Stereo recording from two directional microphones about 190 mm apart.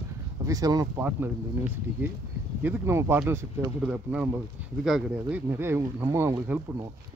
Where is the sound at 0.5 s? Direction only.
20° right (ahead or behind).